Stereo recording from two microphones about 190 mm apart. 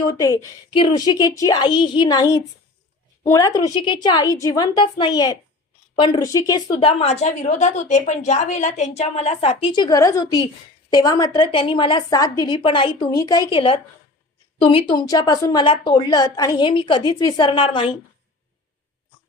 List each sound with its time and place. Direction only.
0.1 s a woman's voice: 20° left (ahead or behind)